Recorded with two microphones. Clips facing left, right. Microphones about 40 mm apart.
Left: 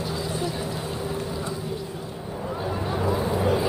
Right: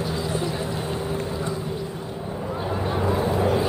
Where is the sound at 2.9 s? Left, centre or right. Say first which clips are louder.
Right 2 dB; centre.